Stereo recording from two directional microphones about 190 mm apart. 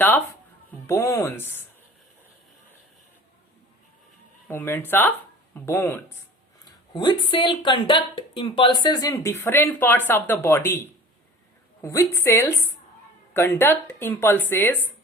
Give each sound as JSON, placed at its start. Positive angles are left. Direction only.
{"t": 0.9, "sound": "speech", "side_deg": 15}
{"t": 4.4, "sound": "speech", "side_deg": 10}
{"t": 6.7, "sound": "speech", "side_deg": 25}